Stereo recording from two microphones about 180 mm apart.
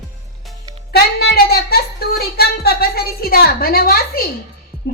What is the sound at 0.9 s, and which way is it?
A woman's voice, 65° left (ahead or behind).